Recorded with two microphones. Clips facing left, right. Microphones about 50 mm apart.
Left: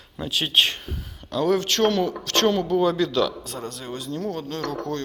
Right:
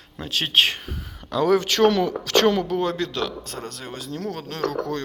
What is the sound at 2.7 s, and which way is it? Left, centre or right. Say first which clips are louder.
Speech: left 4 dB; right.